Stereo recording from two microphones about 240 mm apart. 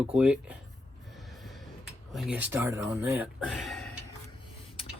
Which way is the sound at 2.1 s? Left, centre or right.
Centre.